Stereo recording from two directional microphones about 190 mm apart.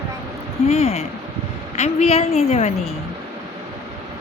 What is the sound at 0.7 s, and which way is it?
A woman's voice, 35° left (ahead or behind).